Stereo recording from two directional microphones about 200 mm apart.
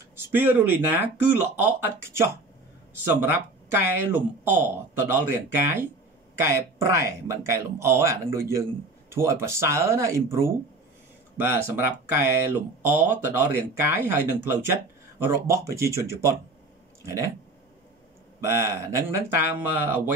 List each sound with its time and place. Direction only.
0.1 s speech: 10° right (ahead or behind)
18.4 s speech: 15° right (ahead or behind)